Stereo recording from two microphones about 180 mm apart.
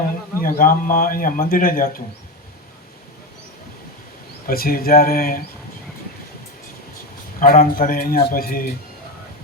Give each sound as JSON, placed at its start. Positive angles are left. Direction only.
{"t": 0.4, "sound": "a man's voice", "side_deg": 50}
{"t": 4.4, "sound": "speech", "side_deg": 55}
{"t": 7.3, "sound": "a man's voice", "side_deg": 50}